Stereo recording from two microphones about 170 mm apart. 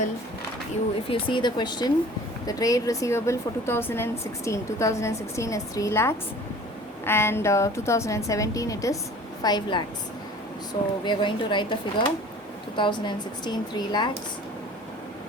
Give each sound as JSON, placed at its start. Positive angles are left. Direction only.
{"t": 1.1, "sound": "a woman's voice", "side_deg": 25}
{"t": 11.0, "sound": "speech", "side_deg": 30}